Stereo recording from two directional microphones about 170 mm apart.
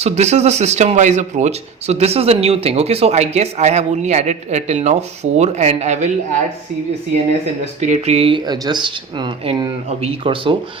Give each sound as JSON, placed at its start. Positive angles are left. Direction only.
{"t": 0.0, "sound": "speech", "side_deg": -40}
{"t": 7.8, "sound": "speech", "side_deg": -40}